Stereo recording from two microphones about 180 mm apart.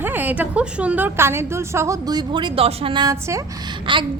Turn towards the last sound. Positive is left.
turn(degrees=-25)  # may be behind; listen again after turning